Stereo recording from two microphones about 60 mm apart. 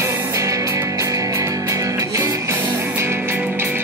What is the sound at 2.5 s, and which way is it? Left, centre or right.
Music, right.